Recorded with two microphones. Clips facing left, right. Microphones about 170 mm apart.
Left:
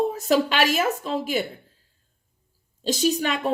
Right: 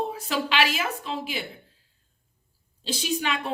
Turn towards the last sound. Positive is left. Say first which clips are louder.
# left 5 dB
turn(degrees=40)  # may be behind; listen again after turning